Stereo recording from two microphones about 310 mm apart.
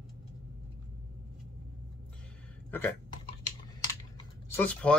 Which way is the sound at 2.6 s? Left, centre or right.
Centre.